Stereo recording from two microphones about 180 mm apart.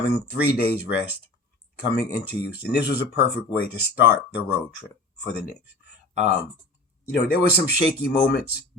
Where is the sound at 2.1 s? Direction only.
65° left (ahead or behind).